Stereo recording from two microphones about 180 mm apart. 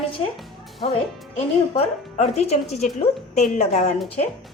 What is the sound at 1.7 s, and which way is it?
Speech, 35° left (ahead or behind).